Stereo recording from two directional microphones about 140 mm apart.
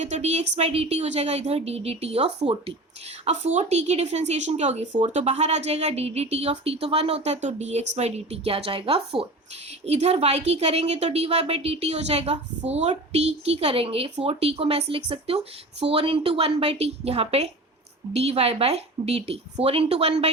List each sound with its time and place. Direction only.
0.0 s a woman's voice: 55° right (ahead or behind)